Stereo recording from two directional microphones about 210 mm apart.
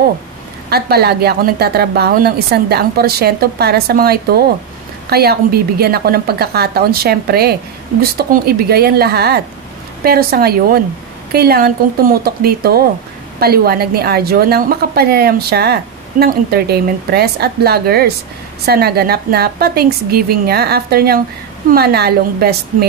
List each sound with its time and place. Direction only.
0.7 s a woman's voice: 50° right (ahead or behind)